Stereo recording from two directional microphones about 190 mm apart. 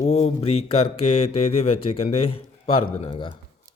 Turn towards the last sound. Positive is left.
turn(degrees=30)  # may be behind; listen again after turning